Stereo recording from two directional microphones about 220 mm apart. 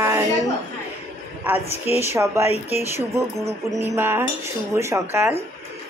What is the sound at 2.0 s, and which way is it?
Speech, 10° right (ahead or behind).